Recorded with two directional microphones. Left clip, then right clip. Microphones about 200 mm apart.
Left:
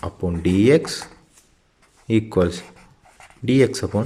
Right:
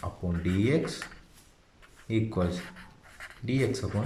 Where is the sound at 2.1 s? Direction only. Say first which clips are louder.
Left 11 dB; 45° left (ahead or behind).